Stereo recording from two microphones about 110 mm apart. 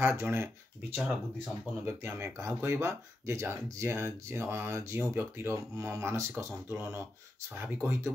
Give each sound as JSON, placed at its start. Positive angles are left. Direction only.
{"t": 0.0, "sound": "speech", "side_deg": -25}
{"t": 0.9, "sound": "speech", "side_deg": -5}
{"t": 1.9, "sound": "speech", "side_deg": -20}